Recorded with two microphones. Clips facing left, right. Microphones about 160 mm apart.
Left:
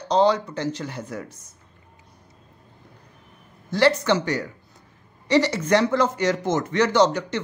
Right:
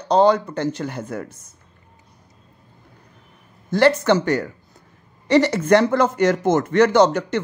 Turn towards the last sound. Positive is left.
turn(degrees=-55)  # may be behind; listen again after turning